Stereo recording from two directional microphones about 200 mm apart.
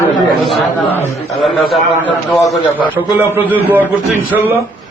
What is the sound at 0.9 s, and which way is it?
Speech, 15° left (ahead or behind).